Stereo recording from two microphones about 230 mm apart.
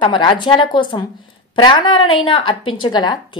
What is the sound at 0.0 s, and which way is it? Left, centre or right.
A woman's voice, left.